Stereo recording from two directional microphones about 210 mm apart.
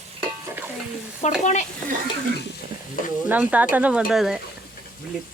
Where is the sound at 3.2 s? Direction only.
5° right (ahead or behind).